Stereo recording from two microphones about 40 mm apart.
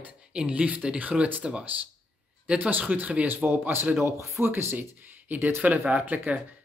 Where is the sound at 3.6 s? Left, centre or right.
Right.